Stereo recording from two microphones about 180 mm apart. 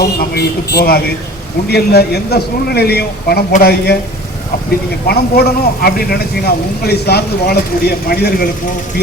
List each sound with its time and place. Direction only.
0.0 s speech: 60° left (ahead or behind)
5.0 s speech: 60° left (ahead or behind)